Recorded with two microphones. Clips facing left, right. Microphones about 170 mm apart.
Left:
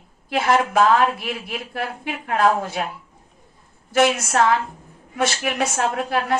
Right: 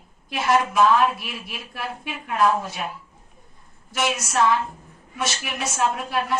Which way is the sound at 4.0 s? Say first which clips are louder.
Left 5 dB; 60° left (ahead or behind).